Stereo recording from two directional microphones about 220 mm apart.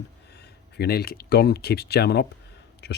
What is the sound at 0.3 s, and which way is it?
Speech, 50° left (ahead or behind).